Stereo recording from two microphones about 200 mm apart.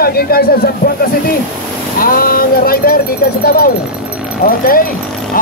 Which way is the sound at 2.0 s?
45° left (ahead or behind).